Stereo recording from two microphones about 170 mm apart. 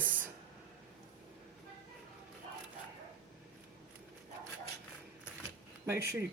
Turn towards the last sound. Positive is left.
turn(degrees=-15)  # may be behind; listen again after turning